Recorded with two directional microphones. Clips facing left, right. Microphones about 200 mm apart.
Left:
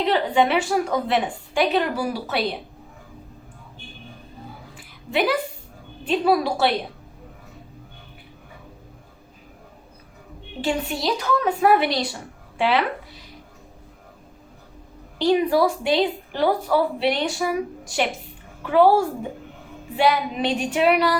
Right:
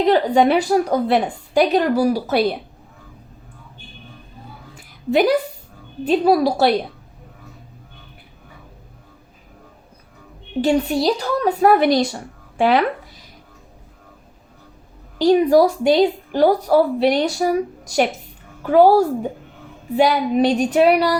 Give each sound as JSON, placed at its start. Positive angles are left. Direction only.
{"t": 0.0, "sound": "a woman's voice", "side_deg": -40}
{"t": 4.8, "sound": "music", "side_deg": -40}
{"t": 6.1, "sound": "a woman's voice", "side_deg": -40}
{"t": 10.6, "sound": "a woman's voice", "side_deg": -35}
{"t": 15.2, "sound": "a woman's voice", "side_deg": -40}